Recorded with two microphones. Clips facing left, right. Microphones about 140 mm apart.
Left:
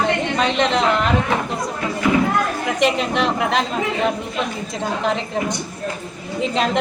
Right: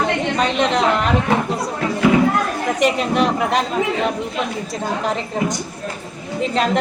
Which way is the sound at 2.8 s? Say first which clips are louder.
Right 1 dB; 5° right (ahead or behind).